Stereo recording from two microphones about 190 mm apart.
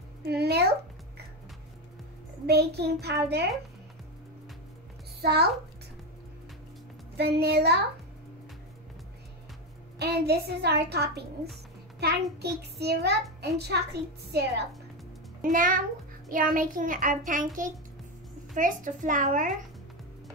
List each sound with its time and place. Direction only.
0.2 s a sound: 60° right (ahead or behind)
2.4 s a child's voice: 60° right (ahead or behind)
5.2 s a child's voice: 60° right (ahead or behind)
7.2 s a child's voice: 60° right (ahead or behind)
9.9 s a child's voice: 60° right (ahead or behind)
15.4 s child singing: 45° right (ahead or behind)
18.5 s a child's voice: 40° right (ahead or behind)